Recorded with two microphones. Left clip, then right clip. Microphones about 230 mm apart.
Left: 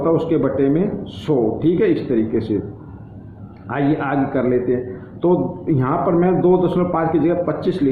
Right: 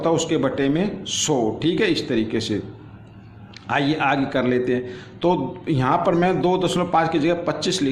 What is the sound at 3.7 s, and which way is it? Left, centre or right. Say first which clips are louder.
A man's voice: even; right.